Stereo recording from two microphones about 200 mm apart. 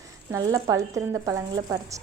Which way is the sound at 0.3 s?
15° right (ahead or behind).